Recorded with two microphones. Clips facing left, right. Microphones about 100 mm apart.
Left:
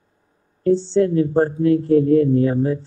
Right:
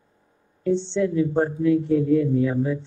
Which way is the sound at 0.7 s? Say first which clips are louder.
Left 8 dB; 35° left (ahead or behind).